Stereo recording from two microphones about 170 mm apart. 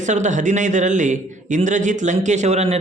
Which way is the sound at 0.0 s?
45° right (ahead or behind).